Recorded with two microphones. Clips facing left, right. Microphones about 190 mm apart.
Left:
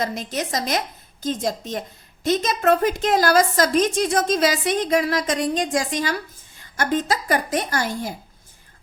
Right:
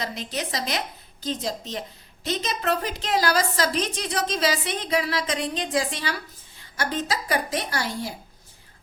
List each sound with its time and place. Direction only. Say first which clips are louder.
0.0 s a woman's voice: left 5 dB; 45° left (ahead or behind)